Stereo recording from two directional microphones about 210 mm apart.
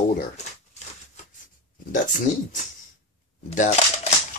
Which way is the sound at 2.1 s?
35° left (ahead or behind).